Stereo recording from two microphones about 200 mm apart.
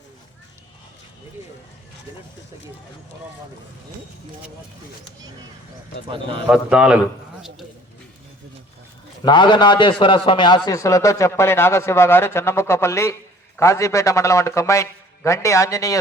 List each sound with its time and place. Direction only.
6.5 s a man's voice: 5° right (ahead or behind)
9.2 s a man's voice: 25° left (ahead or behind)